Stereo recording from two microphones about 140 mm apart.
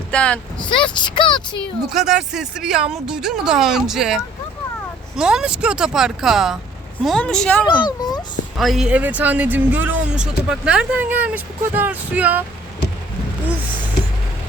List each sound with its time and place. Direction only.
0.1 s speech: 10° left (ahead or behind)
0.7 s speech: 35° left (ahead or behind)
1.9 s speech: 5° right (ahead or behind)
7.9 s a sound: 30° left (ahead or behind)
8.5 s speech: centre (ahead or behind)